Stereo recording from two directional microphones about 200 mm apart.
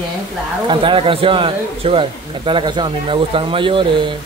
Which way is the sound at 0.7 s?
25° right (ahead or behind).